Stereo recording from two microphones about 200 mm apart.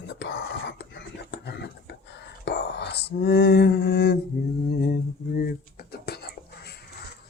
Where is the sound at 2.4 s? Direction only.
55° left (ahead or behind).